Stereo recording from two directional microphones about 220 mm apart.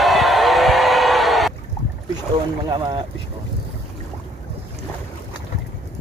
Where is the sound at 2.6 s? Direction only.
20° right (ahead or behind).